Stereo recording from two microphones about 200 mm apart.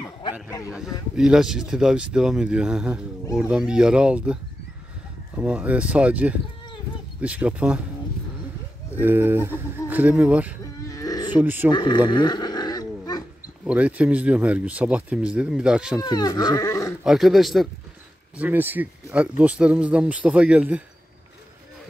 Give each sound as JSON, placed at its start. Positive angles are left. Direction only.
{"t": 0.2, "sound": "a man's voice", "side_deg": 15}
{"t": 0.7, "sound": "speech", "side_deg": -5}
{"t": 9.0, "sound": "speech", "side_deg": -10}
{"t": 10.9, "sound": "roaring cats", "side_deg": 15}
{"t": 11.3, "sound": "speech", "side_deg": -10}
{"t": 11.7, "sound": "speech", "side_deg": 20}
{"t": 12.1, "sound": "roaring cats", "side_deg": 20}
{"t": 13.7, "sound": "speech", "side_deg": -5}
{"t": 16.0, "sound": "speech", "side_deg": 20}
{"t": 17.0, "sound": "speech", "side_deg": 0}